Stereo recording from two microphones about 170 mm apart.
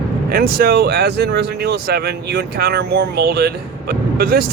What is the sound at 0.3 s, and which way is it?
Speech, 60° right (ahead or behind).